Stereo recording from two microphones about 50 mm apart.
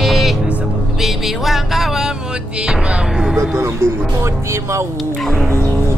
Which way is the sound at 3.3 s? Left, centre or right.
Right.